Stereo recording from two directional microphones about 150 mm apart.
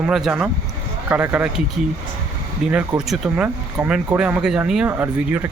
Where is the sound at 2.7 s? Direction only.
5° right (ahead or behind).